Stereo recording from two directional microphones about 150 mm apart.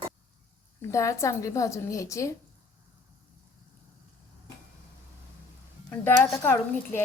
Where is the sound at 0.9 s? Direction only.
20° left (ahead or behind).